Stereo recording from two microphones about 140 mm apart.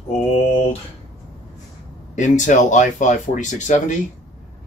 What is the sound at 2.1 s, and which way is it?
Speech, 60° left (ahead or behind).